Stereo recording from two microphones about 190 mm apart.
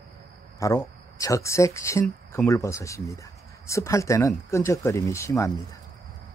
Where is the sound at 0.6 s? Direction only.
15° left (ahead or behind).